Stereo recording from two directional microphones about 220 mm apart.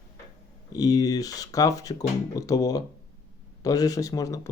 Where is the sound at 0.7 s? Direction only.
15° left (ahead or behind).